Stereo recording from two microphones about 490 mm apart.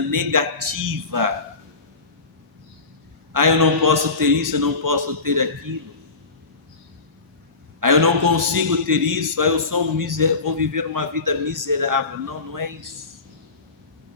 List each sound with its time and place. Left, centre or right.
0.1 s a man's voice: right
3.3 s a man's voice: right
7.8 s a man's voice: right